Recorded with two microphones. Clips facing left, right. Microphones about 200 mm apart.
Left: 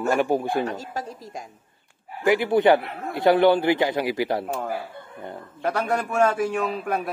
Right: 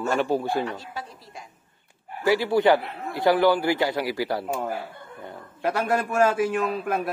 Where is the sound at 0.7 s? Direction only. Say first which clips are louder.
Left 4 dB; 45° left (ahead or behind).